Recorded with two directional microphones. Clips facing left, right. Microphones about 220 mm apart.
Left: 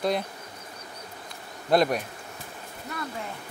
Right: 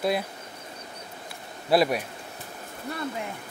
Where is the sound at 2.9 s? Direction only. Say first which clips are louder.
Right 3 dB; 30° right (ahead or behind).